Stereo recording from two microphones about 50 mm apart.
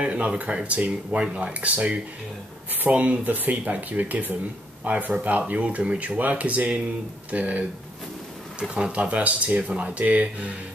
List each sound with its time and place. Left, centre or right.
0.0 s speech: right